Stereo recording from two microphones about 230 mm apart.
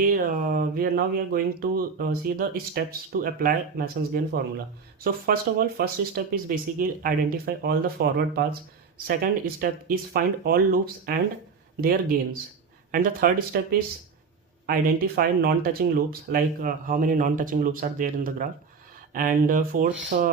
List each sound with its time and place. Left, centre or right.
0.0 s speech: right